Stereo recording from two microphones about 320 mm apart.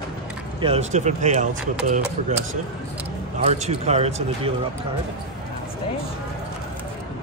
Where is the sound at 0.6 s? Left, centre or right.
Centre.